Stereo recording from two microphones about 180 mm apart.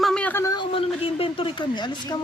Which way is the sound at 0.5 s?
30° left (ahead or behind).